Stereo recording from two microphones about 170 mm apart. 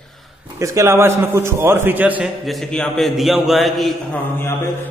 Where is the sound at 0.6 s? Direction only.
20° right (ahead or behind); by 4.2 s centre (ahead or behind).